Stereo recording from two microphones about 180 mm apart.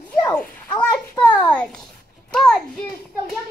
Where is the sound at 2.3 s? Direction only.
5° left (ahead or behind).